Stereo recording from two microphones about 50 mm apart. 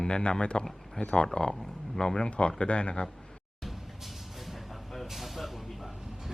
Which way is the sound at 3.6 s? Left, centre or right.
Centre.